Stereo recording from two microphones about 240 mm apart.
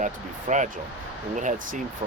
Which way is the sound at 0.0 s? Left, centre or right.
Right.